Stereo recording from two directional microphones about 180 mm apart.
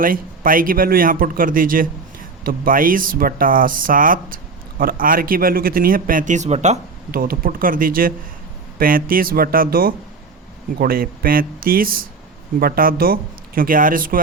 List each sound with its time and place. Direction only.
0.0 s speech: 50° right (ahead or behind)
7.1 s speech: 55° right (ahead or behind)